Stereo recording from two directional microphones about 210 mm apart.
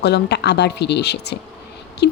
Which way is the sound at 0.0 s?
55° left (ahead or behind).